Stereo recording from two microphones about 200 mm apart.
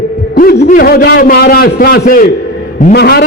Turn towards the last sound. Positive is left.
turn(degrees=55)  # may be behind; listen again after turning